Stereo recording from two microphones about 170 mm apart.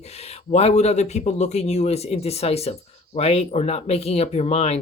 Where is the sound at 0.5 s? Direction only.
40° left (ahead or behind).